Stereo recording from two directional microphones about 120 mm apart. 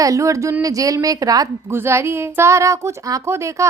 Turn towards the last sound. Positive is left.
turn(degrees=-25)  # may be behind; listen again after turning